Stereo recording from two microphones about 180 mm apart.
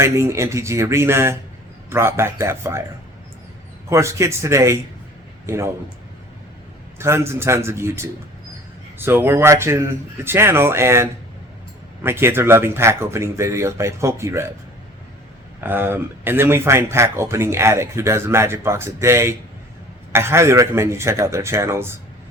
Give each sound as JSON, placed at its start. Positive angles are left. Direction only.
{"t": 0.0, "sound": "speech", "side_deg": -15}
{"t": 3.8, "sound": "speech", "side_deg": -15}
{"t": 7.0, "sound": "speech", "side_deg": -15}
{"t": 15.6, "sound": "speech", "side_deg": -10}